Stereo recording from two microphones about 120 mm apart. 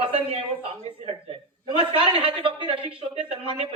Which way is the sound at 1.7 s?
45° right (ahead or behind).